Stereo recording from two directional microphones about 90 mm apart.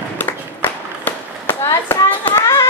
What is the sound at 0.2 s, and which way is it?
Clapping, 20° left (ahead or behind).